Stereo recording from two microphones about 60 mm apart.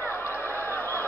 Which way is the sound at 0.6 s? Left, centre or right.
Left.